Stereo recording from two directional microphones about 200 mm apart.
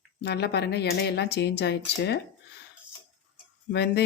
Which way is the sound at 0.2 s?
55° left (ahead or behind).